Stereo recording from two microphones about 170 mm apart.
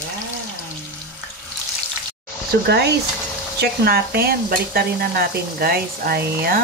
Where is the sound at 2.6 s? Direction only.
75° right (ahead or behind).